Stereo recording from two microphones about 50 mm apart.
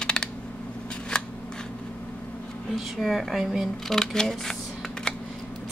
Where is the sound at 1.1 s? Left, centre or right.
Centre.